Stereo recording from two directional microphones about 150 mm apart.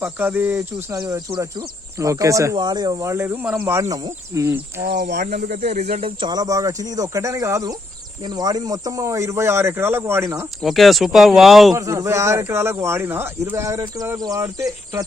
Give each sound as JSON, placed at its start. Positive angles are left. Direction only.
{"t": 0.0, "sound": "cricket", "side_deg": -15}
{"t": 0.9, "sound": "speech", "side_deg": -25}
{"t": 4.8, "sound": "speech", "side_deg": -90}
{"t": 5.2, "sound": "speech", "side_deg": -60}
{"t": 5.6, "sound": "speech", "side_deg": -45}
{"t": 10.6, "sound": "speech", "side_deg": 0}
{"t": 11.7, "sound": "speech", "side_deg": -20}